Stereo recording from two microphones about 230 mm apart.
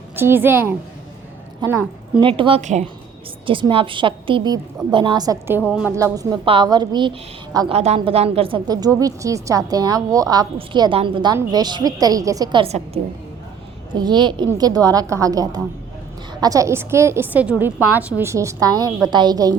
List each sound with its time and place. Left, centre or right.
0.2 s a woman's voice: centre
2.2 s a woman's voice: right
14.0 s a woman's voice: centre